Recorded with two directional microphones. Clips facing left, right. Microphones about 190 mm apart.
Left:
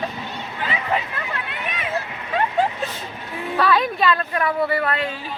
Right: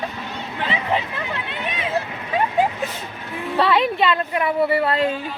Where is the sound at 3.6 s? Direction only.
25° right (ahead or behind).